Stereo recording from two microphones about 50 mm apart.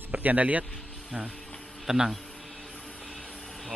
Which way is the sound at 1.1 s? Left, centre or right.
Centre.